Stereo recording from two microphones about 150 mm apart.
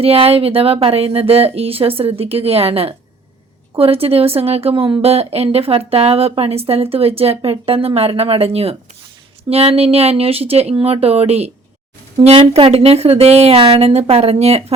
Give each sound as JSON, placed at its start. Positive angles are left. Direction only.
{"t": 0.0, "sound": "speech", "side_deg": -40}